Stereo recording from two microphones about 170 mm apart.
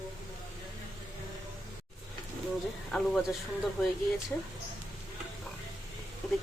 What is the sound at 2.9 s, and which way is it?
Speech, centre (ahead or behind).